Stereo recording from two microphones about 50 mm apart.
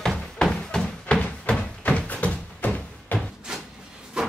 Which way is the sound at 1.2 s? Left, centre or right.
Left.